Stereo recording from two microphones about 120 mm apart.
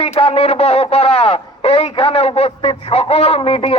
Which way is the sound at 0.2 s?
50° left (ahead or behind).